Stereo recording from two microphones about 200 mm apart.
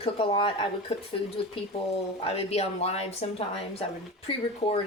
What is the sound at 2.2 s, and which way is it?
A woman's voice, 30° left (ahead or behind).